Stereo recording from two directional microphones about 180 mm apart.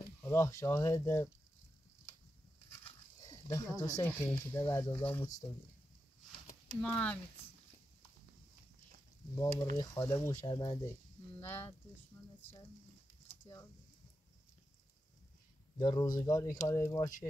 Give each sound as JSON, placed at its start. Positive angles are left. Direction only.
{"t": 0.2, "sound": "speech", "side_deg": 15}
{"t": 2.8, "sound": "dog", "side_deg": 20}
{"t": 4.0, "sound": "speech", "side_deg": 15}
{"t": 6.7, "sound": "speech", "side_deg": 5}
{"t": 9.3, "sound": "speech", "side_deg": 15}
{"t": 15.8, "sound": "speech", "side_deg": 25}